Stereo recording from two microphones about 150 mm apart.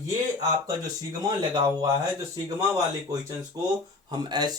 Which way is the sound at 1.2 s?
25° right (ahead or behind).